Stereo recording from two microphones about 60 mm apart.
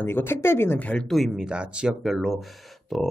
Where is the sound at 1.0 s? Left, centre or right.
Centre.